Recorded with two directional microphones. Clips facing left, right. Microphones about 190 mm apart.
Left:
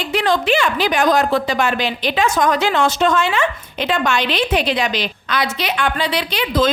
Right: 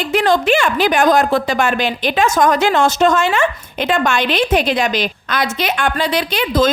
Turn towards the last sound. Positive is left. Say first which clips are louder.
# right 2 dB
turn(degrees=-45)  # may be behind; listen again after turning